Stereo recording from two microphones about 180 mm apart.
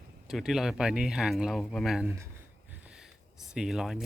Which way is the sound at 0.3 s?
Centre (ahead or behind).